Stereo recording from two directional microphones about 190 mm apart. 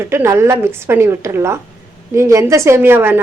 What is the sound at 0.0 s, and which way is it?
A woman's voice, 10° right (ahead or behind).